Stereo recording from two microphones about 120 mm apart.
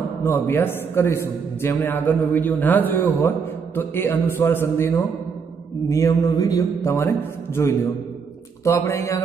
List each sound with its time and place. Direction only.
0.2 s a man's voice: 15° left (ahead or behind)